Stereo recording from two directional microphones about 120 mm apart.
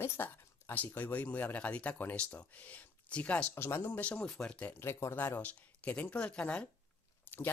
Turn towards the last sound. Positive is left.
turn(degrees=20)  # may be behind; listen again after turning